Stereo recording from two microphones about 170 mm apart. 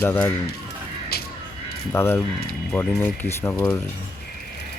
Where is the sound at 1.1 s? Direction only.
70° left (ahead or behind).